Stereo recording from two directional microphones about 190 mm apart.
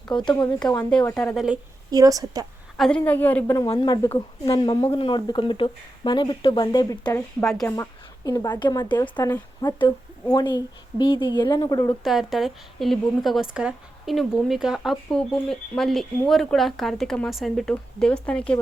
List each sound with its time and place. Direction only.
0.1 s speech: 5° left (ahead or behind)
1.9 s a woman's voice: 20° right (ahead or behind)
2.7 s a woman's voice: centre (ahead or behind); by 7.2 s 20° left (ahead or behind)
7.2 s speech: centre (ahead or behind)
7.8 s speech: 15° left (ahead or behind)
12.0 s speech: centre (ahead or behind)